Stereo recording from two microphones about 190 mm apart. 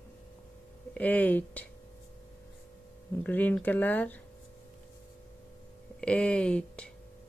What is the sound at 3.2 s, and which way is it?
Speech, 10° left (ahead or behind).